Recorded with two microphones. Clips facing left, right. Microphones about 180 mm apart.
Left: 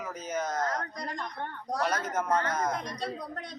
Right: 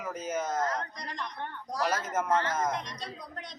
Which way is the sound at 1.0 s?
50° left (ahead or behind).